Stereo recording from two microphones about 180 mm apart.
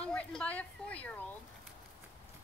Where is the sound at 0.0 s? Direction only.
5° left (ahead or behind).